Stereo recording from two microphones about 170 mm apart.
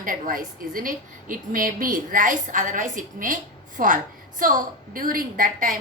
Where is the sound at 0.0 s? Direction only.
55° right (ahead or behind).